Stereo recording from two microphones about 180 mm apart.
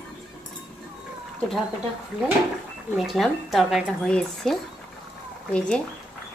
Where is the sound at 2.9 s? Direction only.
Centre (ahead or behind).